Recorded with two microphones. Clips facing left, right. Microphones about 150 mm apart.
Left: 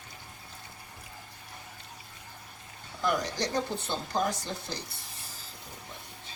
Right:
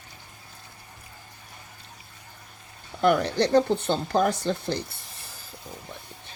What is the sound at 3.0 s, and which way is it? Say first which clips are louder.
Speech: right 8 dB; 65° right (ahead or behind).